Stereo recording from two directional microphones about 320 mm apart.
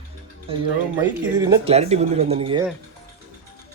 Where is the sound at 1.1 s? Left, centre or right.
Centre.